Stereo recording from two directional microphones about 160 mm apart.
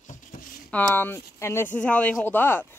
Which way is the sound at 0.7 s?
10° left (ahead or behind).